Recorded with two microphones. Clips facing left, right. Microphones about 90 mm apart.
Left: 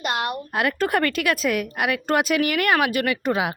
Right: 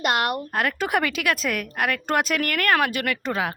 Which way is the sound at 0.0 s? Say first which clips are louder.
Right 3 dB; 65° right (ahead or behind).